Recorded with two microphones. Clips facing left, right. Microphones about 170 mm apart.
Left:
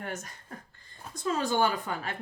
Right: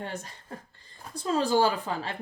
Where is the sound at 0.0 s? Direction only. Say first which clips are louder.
Right 1 dB; 30° right (ahead or behind).